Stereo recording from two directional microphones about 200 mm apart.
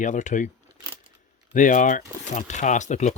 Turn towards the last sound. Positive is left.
turn(degrees=35)  # may be behind; listen again after turning